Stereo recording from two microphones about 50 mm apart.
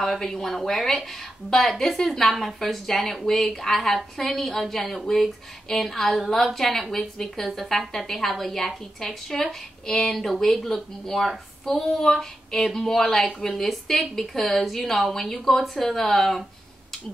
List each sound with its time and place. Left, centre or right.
0.0 s speech: centre